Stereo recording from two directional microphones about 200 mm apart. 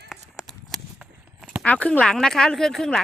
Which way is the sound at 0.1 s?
Centre (ahead or behind).